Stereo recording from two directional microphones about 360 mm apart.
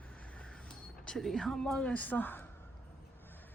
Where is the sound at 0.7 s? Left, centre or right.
Centre.